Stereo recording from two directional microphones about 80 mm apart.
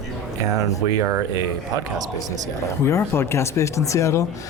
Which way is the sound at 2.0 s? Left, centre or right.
Right.